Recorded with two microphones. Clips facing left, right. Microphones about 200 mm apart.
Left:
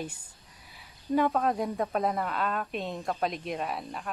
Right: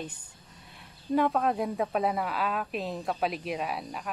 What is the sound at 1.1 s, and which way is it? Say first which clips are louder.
A woman's voice: even; centre (ahead or behind).